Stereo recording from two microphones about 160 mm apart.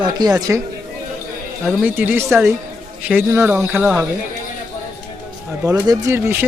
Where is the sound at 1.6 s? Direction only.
10° right (ahead or behind).